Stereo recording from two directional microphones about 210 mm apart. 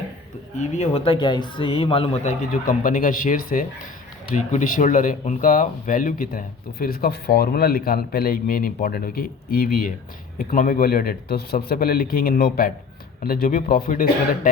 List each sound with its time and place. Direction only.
0.5 s speech: 35° left (ahead or behind)